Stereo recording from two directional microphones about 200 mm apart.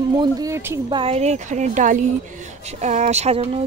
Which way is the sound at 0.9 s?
25° right (ahead or behind).